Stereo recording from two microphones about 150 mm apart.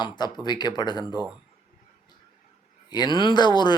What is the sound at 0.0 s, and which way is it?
Speech, 30° left (ahead or behind).